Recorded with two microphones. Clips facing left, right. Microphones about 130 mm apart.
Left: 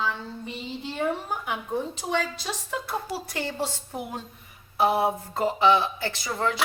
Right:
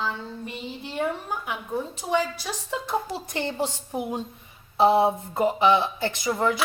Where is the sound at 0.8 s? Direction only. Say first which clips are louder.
Even; 10° right (ahead or behind).